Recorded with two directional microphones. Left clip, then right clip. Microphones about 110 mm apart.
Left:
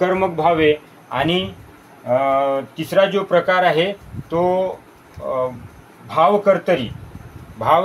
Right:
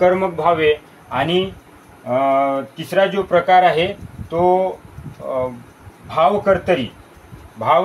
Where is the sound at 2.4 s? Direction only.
70° left (ahead or behind).